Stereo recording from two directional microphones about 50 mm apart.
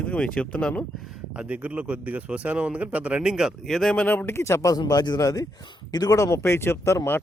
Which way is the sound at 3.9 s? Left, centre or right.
Left.